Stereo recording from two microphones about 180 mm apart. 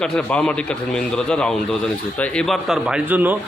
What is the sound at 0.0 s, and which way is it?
A man's voice, 5° left (ahead or behind).